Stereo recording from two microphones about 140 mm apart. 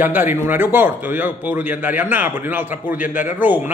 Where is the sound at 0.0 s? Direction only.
15° right (ahead or behind).